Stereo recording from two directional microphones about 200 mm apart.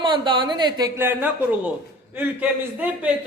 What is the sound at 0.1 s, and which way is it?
Speech, 25° right (ahead or behind).